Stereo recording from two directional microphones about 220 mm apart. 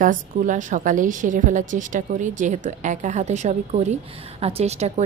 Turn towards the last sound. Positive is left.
turn(degrees=-30)  # may be behind; listen again after turning